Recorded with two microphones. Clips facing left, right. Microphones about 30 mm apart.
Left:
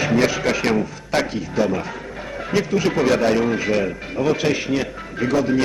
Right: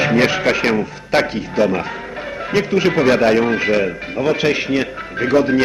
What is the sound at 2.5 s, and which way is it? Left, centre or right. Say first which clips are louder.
Speech: right 4 dB; right.